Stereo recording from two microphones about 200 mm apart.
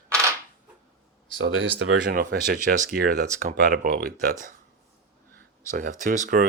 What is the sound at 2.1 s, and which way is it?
Speech, 45° right (ahead or behind).